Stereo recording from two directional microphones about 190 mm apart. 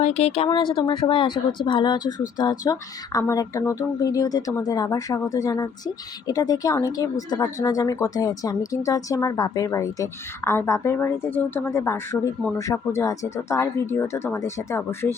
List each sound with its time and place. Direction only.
0.0 s speech: 35° left (ahead or behind); by 15.1 s 15° left (ahead or behind)